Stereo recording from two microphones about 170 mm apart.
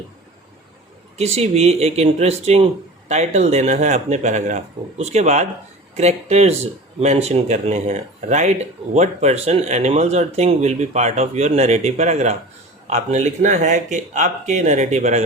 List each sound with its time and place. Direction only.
1.2 s speech: 40° right (ahead or behind)